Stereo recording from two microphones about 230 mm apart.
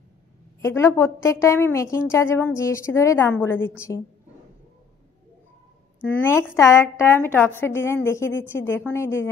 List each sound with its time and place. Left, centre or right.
0.6 s a woman's voice: centre
6.2 s a woman's voice: centre